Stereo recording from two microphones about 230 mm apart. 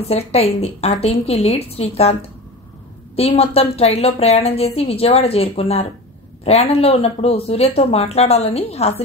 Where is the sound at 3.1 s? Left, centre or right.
Left.